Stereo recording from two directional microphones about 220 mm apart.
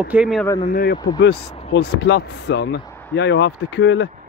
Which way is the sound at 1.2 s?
50° left (ahead or behind).